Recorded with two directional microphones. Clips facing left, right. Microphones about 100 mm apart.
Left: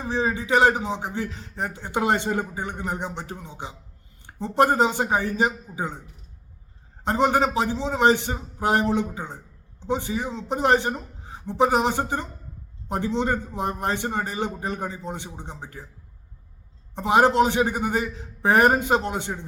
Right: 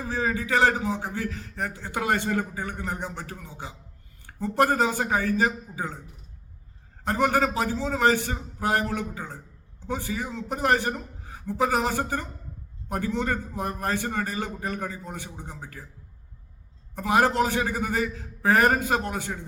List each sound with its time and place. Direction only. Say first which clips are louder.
0.0 s a man's voice: left 2 dB; 20° left (ahead or behind)
7.0 s a man's voice: left 2 dB; 20° left (ahead or behind)
16.9 s a man's voice: left 4 dB; 20° left (ahead or behind)